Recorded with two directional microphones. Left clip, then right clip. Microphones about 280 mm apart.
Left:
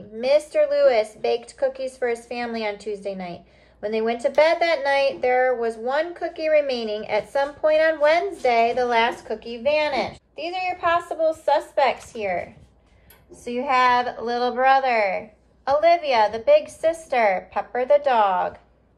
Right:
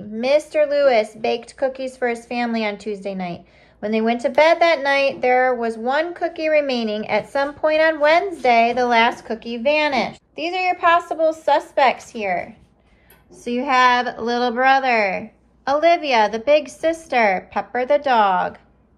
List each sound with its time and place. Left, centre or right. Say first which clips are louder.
0.2 s a woman's voice: right 2 dB; centre